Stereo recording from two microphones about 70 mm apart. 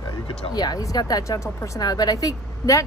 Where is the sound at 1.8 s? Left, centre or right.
Left.